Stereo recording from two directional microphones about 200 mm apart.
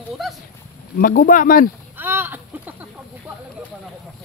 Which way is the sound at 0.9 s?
45° left (ahead or behind).